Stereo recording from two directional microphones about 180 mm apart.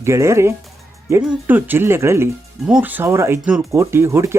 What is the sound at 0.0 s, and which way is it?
Speech, 15° right (ahead or behind).